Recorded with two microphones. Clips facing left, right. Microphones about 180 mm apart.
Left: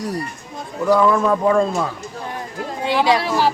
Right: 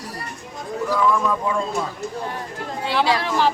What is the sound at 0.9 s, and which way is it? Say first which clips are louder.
Speech: left 6 dB; 65° left (ahead or behind).